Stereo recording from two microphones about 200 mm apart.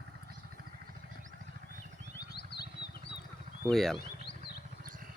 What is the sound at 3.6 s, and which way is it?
Speech, centre (ahead or behind).